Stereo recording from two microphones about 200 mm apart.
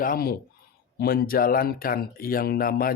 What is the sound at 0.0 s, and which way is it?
Speech, 45° left (ahead or behind).